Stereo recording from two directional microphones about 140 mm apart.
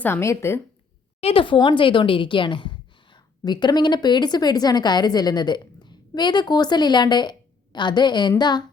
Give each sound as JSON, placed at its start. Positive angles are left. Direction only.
{"t": 0.0, "sound": "speech", "side_deg": 20}
{"t": 1.2, "sound": "a woman's voice", "side_deg": 40}